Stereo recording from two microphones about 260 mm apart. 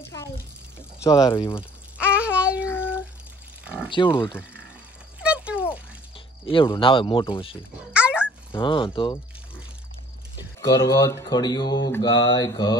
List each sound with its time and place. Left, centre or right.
0.1 s a sound: centre
0.7 s speech: centre
2.1 s child singing: centre
2.6 s a sound: centre
3.9 s speech: centre
5.2 s a sound: centre
6.1 s speech: centre
7.9 s dog: centre
8.5 s speech: centre
10.8 s speech: centre